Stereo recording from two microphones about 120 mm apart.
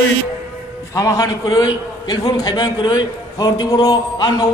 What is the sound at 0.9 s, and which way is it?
A man's voice, 30° left (ahead or behind).